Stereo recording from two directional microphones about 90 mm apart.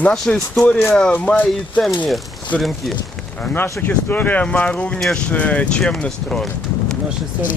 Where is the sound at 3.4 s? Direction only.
20° left (ahead or behind).